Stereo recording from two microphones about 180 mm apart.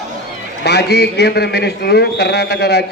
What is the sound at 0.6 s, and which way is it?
A man's voice, 70° left (ahead or behind).